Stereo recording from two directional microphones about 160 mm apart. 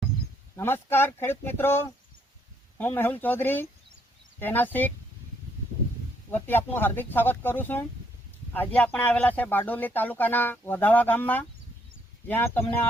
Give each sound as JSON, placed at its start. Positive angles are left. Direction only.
{"t": 0.5, "sound": "speech", "side_deg": 15}
{"t": 6.3, "sound": "speech", "side_deg": 10}